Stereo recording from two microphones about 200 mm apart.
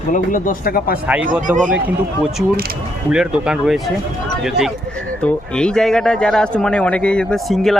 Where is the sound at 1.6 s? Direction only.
5° right (ahead or behind).